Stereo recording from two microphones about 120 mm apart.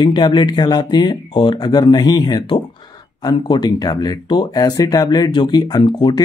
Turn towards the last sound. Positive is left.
turn(degrees=35)  # may be behind; listen again after turning